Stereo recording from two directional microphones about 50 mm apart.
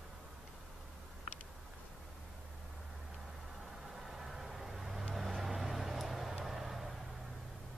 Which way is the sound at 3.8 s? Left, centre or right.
Centre.